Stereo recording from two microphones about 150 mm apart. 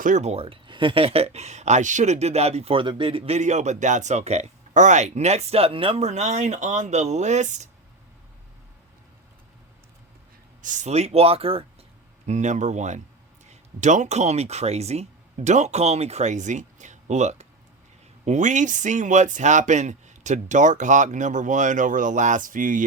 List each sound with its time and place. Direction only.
0.0 s speech: 50° right (ahead or behind)
10.6 s speech: 55° right (ahead or behind); by 11.6 s 40° right (ahead or behind)
12.2 s speech: 50° right (ahead or behind)